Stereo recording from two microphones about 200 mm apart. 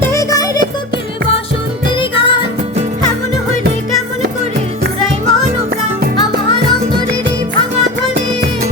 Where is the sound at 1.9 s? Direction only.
25° left (ahead or behind).